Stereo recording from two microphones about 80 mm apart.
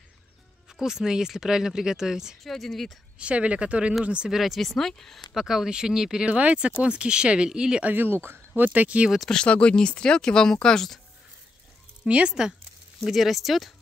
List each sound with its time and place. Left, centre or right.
0.7 s speech: centre
3.2 s speech: centre
4.4 s speech: centre
7.9 s speech: right
9.1 s speech: centre
12.0 s speech: centre